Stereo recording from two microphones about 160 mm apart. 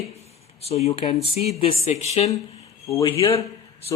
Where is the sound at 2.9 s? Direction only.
20° left (ahead or behind).